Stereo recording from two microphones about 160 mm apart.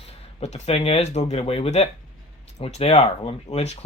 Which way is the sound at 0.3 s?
40° left (ahead or behind).